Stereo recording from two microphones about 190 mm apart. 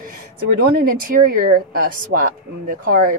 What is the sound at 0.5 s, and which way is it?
Speech, 50° right (ahead or behind).